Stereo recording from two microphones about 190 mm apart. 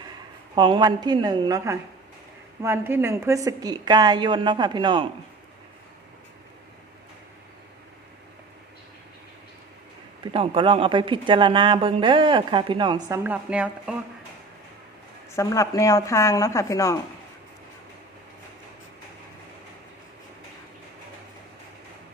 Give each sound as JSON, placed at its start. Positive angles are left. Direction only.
{"t": 0.5, "sound": "a woman's voice", "side_deg": -25}
{"t": 10.3, "sound": "a woman's voice", "side_deg": -30}
{"t": 15.4, "sound": "speech", "side_deg": 15}